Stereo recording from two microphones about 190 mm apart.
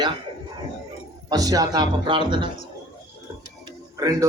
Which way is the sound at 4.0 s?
20° right (ahead or behind).